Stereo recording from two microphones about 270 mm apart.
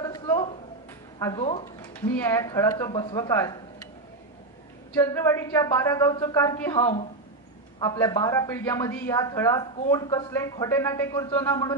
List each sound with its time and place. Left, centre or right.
0.0 s a sound: centre
1.2 s speech: centre
1.8 s a woman's voice: centre
4.9 s a woman's voice: centre